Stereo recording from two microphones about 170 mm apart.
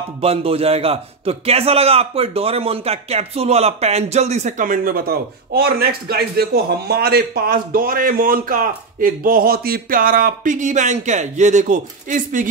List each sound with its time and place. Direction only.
0.2 s a man's voice: 35° right (ahead or behind); by 12.4 s 50° right (ahead or behind)